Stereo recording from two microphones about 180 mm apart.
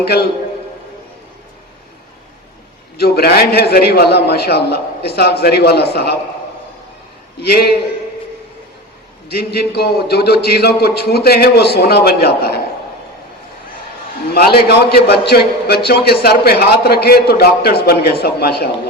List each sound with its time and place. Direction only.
3.0 s a man's voice: 60° left (ahead or behind)
7.3 s a man's voice: 65° left (ahead or behind)
9.3 s a man's voice: 60° left (ahead or behind)
14.3 s a man's voice: 60° left (ahead or behind)